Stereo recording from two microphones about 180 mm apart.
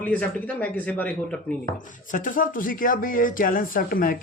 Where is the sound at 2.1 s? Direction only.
50° left (ahead or behind).